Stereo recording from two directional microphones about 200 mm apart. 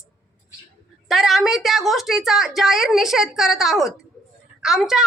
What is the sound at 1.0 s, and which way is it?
A woman's voice, centre (ahead or behind).